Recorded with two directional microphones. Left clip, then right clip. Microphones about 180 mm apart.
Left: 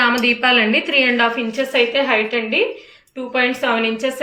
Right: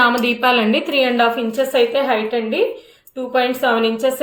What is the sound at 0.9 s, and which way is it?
A woman's voice, 35° right (ahead or behind).